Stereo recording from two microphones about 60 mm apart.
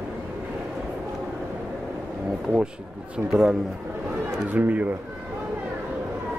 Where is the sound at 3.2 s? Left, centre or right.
Right.